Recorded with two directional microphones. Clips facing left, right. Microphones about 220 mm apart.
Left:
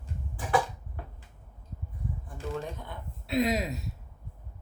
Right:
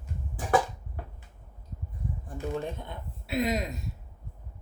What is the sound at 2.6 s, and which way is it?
Speech, 25° right (ahead or behind).